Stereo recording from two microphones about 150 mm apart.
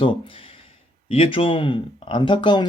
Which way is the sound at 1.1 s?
40° left (ahead or behind).